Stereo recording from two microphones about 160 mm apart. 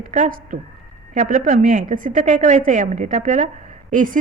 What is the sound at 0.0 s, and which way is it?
A woman's voice, 55° right (ahead or behind).